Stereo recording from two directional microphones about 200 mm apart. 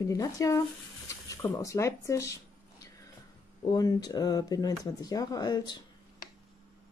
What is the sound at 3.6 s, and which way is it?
Speech, 20° left (ahead or behind).